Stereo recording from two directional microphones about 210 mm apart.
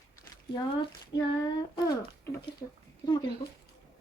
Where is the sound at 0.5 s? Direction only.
20° left (ahead or behind).